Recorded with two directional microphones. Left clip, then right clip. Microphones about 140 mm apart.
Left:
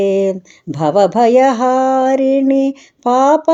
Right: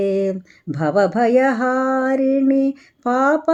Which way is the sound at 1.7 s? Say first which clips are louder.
Left 6 dB; 35° right (ahead or behind).